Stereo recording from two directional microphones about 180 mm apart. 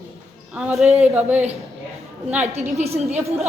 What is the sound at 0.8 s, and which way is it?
Speech, 35° right (ahead or behind).